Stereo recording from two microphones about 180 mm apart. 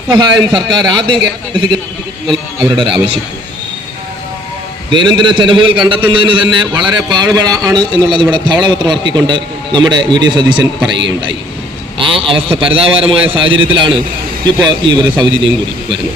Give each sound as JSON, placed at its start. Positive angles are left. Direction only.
{"t": 0.1, "sound": "a man's voice", "side_deg": -25}
{"t": 2.7, "sound": "a man's voice", "side_deg": -30}
{"t": 4.9, "sound": "a man's voice", "side_deg": -25}